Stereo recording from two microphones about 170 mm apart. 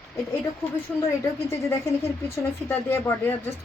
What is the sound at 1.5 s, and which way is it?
Speech, 15° left (ahead or behind).